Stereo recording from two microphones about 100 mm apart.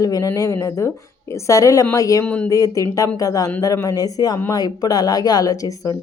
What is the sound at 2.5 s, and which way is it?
Speech, 35° left (ahead or behind).